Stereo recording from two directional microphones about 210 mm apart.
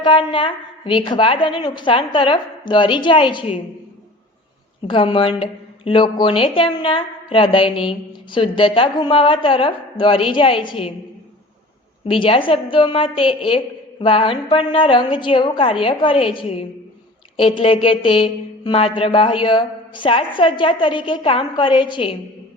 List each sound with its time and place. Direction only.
0.0 s a woman's voice: 25° left (ahead or behind)
4.9 s a woman's voice: 25° left (ahead or behind)
12.0 s a woman's voice: 25° left (ahead or behind)